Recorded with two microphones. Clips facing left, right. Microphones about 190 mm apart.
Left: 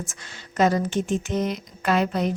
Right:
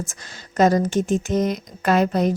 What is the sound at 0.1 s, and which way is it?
Speech, 40° right (ahead or behind).